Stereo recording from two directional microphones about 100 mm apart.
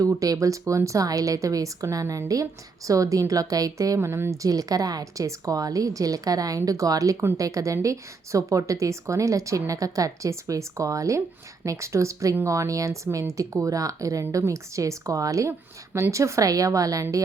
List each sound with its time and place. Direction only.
0.1 s speech: 35° right (ahead or behind)